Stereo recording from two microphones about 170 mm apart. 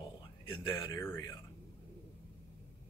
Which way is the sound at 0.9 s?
20° left (ahead or behind).